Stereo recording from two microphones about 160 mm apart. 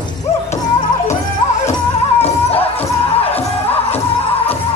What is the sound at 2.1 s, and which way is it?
Music, 40° left (ahead or behind).